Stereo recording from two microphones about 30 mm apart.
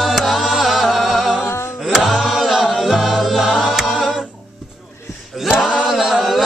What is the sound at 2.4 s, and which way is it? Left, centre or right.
Music, centre.